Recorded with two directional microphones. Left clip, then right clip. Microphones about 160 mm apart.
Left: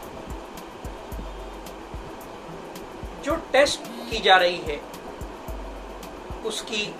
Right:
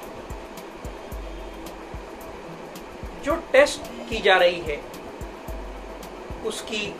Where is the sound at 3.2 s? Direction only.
5° right (ahead or behind).